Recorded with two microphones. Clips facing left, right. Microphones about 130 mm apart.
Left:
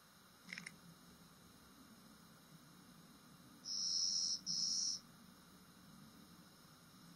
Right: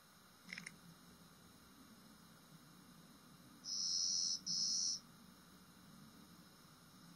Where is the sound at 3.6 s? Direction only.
30° right (ahead or behind).